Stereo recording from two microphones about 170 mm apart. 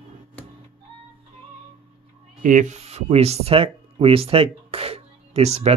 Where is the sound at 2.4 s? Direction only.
50° right (ahead or behind).